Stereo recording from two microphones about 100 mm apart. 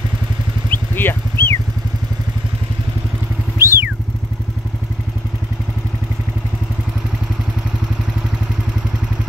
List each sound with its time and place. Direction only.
0.7 s vehicle: 20° left (ahead or behind)
3.5 s vehicle: 25° right (ahead or behind)